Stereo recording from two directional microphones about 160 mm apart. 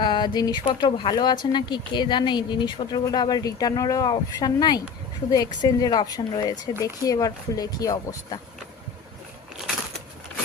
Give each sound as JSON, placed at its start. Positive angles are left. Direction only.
{"t": 0.0, "sound": "speech", "side_deg": 30}